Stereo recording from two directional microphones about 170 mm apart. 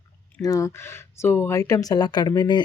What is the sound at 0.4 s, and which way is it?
Speech, 20° left (ahead or behind).